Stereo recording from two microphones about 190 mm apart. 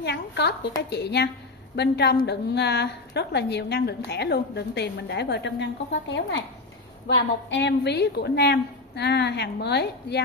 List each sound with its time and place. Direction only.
0.0 s a woman's voice: 60° left (ahead or behind)
7.4 s a woman's voice: 70° left (ahead or behind)